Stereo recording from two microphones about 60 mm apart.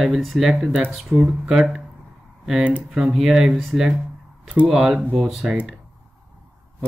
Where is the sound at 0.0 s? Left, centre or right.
Centre.